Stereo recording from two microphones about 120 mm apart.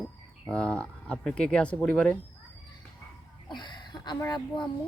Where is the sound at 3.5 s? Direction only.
40° left (ahead or behind).